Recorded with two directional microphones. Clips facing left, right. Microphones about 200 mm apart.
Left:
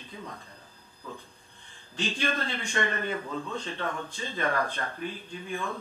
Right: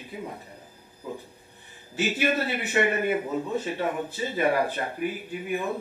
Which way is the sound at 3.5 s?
10° right (ahead or behind).